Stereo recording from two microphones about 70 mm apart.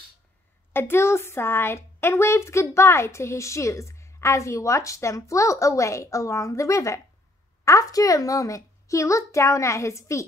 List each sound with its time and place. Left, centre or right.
0.7 s a woman's voice: left